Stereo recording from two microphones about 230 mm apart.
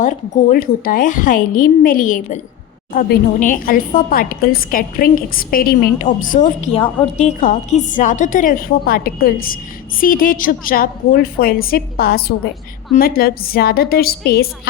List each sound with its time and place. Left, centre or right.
0.0 s a woman's voice: left
6.4 s a woman's voice: left